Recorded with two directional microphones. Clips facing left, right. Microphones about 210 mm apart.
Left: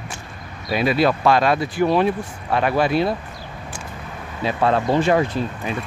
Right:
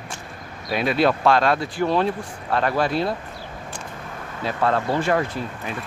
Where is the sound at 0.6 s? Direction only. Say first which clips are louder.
Left 2 dB; 5° left (ahead or behind).